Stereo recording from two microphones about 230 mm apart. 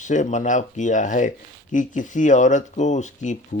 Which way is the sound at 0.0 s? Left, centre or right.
Left.